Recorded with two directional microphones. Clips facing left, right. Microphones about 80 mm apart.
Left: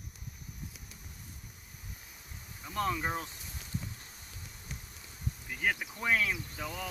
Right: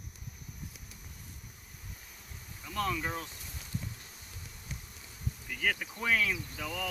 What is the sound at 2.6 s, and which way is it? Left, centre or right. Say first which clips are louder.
Speech: left 1 dB; left.